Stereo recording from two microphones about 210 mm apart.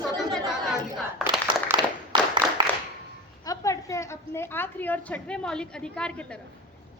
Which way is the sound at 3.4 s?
15° left (ahead or behind).